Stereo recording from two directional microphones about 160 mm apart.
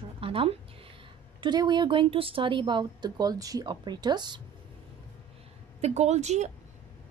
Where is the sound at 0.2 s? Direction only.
35° right (ahead or behind).